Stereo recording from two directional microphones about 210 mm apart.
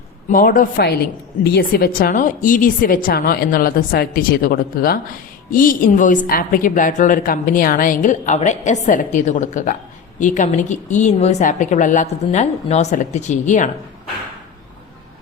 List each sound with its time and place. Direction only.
0.3 s a woman's voice: 40° left (ahead or behind)